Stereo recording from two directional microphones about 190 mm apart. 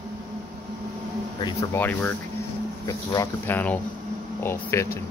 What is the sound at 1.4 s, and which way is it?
Speech, 15° left (ahead or behind).